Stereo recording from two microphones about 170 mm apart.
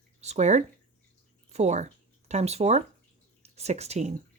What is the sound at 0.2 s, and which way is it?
Speech, 40° right (ahead or behind).